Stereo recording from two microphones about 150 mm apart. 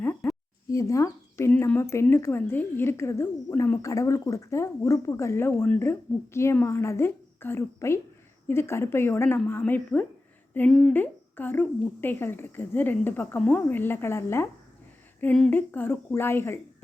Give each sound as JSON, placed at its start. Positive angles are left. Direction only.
{"t": 0.0, "sound": "a sound", "side_deg": 10}
{"t": 0.7, "sound": "speech", "side_deg": 20}
{"t": 10.9, "sound": "a woman's voice", "side_deg": 10}